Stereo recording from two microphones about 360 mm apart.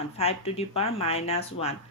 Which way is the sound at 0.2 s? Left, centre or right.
Centre.